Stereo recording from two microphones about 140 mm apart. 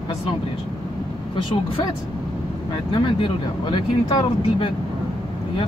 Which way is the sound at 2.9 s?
35° left (ahead or behind).